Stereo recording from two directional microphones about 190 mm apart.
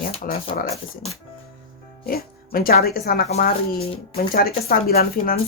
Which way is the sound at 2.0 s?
50° left (ahead or behind).